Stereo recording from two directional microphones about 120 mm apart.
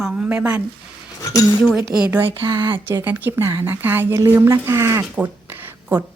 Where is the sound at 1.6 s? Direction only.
5° right (ahead or behind).